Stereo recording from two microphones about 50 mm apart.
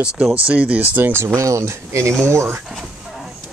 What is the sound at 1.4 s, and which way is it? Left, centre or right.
Speech, right.